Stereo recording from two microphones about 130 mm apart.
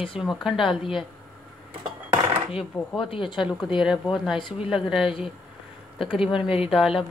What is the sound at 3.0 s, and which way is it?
Speech, 40° left (ahead or behind).